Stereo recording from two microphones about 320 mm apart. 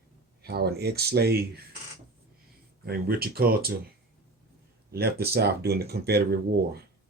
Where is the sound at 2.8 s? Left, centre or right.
Right.